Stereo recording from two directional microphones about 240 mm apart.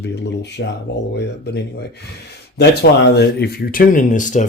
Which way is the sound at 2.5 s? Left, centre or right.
Left.